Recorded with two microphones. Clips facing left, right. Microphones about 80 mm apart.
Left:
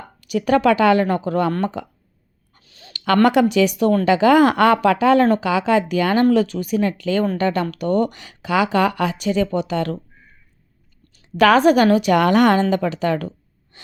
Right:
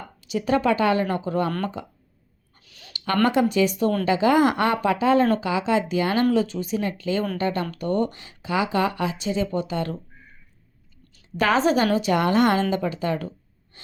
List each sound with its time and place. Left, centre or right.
0.2 s speech: left
2.6 s a sound: left
2.9 s a woman's voice: left
11.3 s a woman's voice: left
13.7 s gasp: left